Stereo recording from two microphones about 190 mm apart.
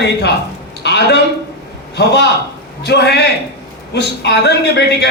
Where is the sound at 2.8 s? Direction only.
60° left (ahead or behind).